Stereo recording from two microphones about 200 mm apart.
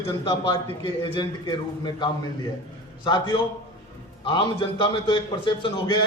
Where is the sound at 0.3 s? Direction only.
25° left (ahead or behind).